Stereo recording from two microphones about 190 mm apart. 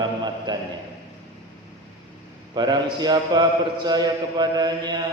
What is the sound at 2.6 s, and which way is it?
Mantra, 20° right (ahead or behind).